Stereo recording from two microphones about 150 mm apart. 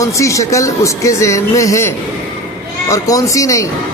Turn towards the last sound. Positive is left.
turn(degrees=20)  # may be behind; listen again after turning